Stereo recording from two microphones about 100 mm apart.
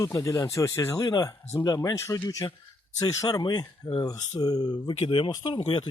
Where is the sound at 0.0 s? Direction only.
35° left (ahead or behind).